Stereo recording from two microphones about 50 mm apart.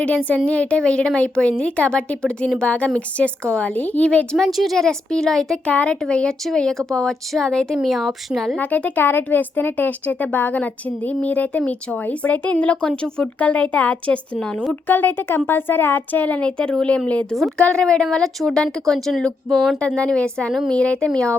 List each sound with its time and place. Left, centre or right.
0.0 s a woman's voice: left
4.4 s speech: centre
4.8 s speech: centre
5.6 s a woman's voice: left
7.8 s speech: centre
8.5 s a woman's voice: left
14.8 s a woman's voice: left
16.4 s a woman's voice: left
18.0 s speech: centre
19.8 s a woman's voice: centre